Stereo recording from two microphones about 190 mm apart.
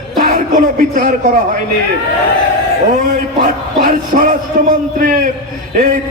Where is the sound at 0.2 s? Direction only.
45° right (ahead or behind).